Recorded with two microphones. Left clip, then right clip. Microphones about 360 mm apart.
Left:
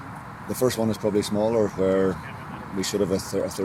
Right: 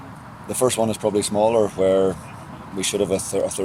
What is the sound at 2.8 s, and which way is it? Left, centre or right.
Speech, right.